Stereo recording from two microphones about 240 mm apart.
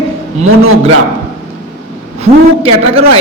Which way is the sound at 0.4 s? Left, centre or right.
Right.